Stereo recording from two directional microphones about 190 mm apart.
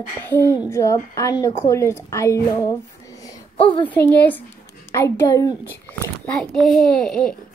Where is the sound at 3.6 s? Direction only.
25° left (ahead or behind).